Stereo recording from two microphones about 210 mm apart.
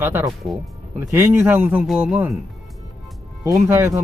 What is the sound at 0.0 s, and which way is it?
Speech, 10° right (ahead or behind).